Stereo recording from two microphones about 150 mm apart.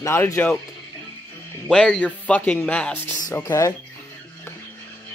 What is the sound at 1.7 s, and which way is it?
Speech, 5° left (ahead or behind).